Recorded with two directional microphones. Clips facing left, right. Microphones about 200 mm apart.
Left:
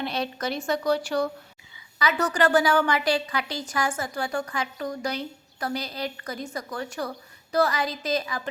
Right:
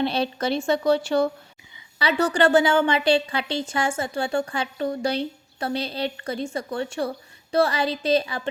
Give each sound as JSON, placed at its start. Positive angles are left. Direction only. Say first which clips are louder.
{"t": 0.0, "sound": "a woman's voice", "louder": "right 5 dB", "side_deg": -30}